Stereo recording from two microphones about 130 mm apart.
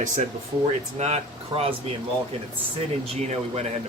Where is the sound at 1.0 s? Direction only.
50° right (ahead or behind).